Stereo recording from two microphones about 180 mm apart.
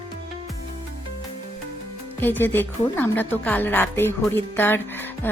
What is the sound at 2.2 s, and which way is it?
A woman's voice, 10° left (ahead or behind).